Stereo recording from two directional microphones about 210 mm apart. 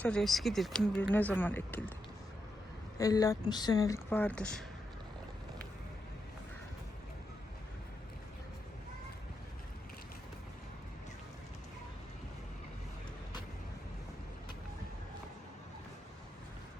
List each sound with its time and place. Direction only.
0.0 s speech: 5° left (ahead or behind)
3.0 s speech: 15° left (ahead or behind)